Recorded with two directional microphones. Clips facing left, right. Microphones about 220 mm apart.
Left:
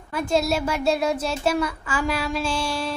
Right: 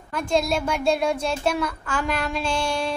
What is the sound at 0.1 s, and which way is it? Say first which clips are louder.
A child's voice: left 1 dB; 5° left (ahead or behind).